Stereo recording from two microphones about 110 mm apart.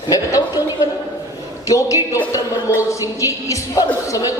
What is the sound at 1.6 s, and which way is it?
A woman's voice, 30° left (ahead or behind).